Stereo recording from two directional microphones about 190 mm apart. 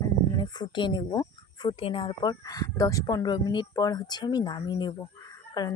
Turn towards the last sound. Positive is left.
turn(degrees=20)  # may be behind; listen again after turning